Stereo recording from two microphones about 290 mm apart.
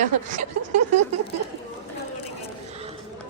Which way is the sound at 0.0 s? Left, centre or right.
Right.